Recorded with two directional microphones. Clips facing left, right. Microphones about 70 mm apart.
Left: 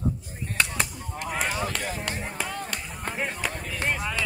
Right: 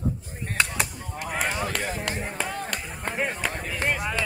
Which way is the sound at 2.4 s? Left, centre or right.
Centre.